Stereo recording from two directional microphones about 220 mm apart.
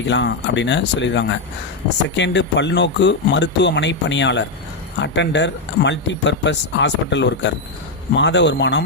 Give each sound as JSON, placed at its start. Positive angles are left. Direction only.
{"t": 0.0, "sound": "speech", "side_deg": 55}